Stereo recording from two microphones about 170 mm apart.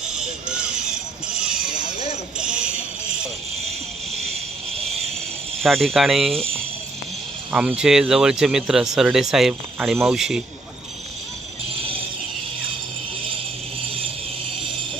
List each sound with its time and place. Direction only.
2.6 s music: 5° right (ahead or behind)
3.6 s vehicle: 40° right (ahead or behind)
5.6 s speech: centre (ahead or behind)
7.5 s speech: 5° right (ahead or behind)